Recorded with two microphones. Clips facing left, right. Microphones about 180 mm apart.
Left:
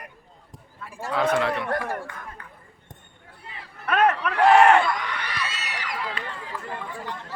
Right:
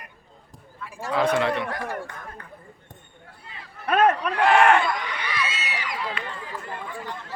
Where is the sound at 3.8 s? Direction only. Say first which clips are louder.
Right 1 dB; 35° right (ahead or behind).